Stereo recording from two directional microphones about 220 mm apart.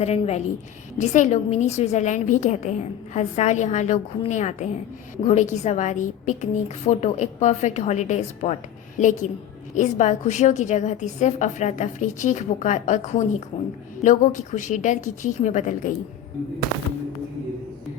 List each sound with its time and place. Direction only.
0.0 s a woman's voice: 30° left (ahead or behind)